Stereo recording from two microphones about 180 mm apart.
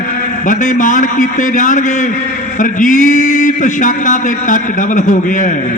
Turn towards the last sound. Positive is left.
turn(degrees=50)  # may be behind; listen again after turning